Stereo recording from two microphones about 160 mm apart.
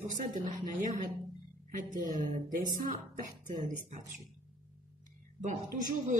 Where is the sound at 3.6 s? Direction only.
55° right (ahead or behind).